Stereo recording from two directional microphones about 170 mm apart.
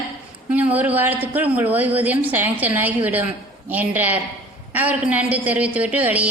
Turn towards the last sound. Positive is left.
turn(degrees=-10)  # may be behind; listen again after turning